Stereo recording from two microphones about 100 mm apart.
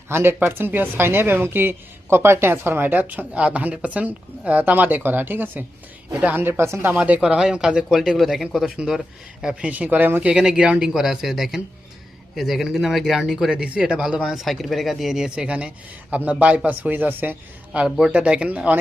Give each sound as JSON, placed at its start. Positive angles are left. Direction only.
{"t": 0.1, "sound": "speech", "side_deg": -25}
{"t": 6.5, "sound": "speech", "side_deg": -30}
{"t": 17.7, "sound": "speech", "side_deg": -5}